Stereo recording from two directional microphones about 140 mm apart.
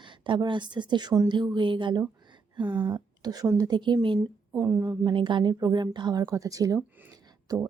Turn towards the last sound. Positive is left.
turn(degrees=-25)  # may be behind; listen again after turning